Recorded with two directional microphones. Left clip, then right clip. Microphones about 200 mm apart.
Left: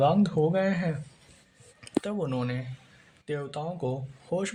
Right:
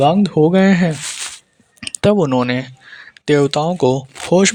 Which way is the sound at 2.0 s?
45° right (ahead or behind).